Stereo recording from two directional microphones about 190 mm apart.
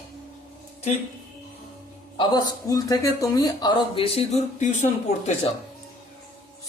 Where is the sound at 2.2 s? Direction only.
20° left (ahead or behind); by 4.7 s 35° left (ahead or behind).